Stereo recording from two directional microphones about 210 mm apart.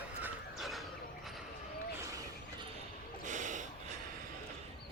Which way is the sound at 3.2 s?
35° right (ahead or behind).